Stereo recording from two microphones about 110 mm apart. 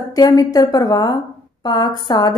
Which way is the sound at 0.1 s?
35° left (ahead or behind).